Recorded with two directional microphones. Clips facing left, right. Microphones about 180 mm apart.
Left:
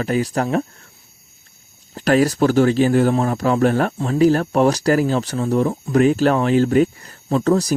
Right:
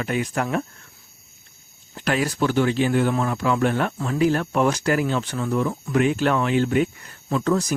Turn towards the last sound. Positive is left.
turn(degrees=35)  # may be behind; listen again after turning